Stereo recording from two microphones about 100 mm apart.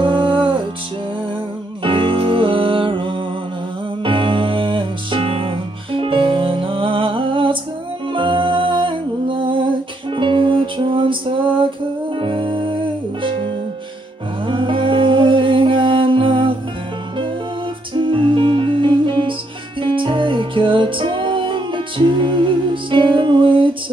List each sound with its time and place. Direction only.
0.0 s music: 55° right (ahead or behind)
1.8 s music: 55° right (ahead or behind)
14.4 s music: 55° right (ahead or behind)
17.9 s music: 55° right (ahead or behind)